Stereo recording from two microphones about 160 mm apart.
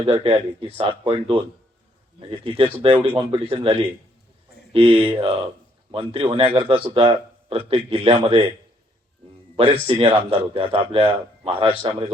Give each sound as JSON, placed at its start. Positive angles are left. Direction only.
{"t": 0.0, "sound": "speech", "side_deg": -35}
{"t": 2.8, "sound": "speech", "side_deg": -35}
{"t": 9.8, "sound": "speech", "side_deg": -35}
{"t": 11.8, "sound": "speech", "side_deg": -20}